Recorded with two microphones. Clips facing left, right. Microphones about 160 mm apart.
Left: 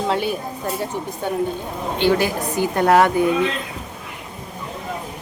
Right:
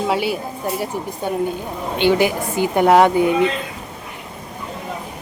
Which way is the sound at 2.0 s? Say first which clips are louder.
Right 2 dB; 20° right (ahead or behind).